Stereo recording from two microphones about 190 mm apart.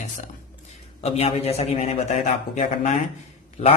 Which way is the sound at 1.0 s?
35° left (ahead or behind).